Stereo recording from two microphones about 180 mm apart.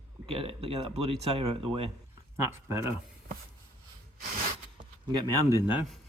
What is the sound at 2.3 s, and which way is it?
Speech, 15° right (ahead or behind).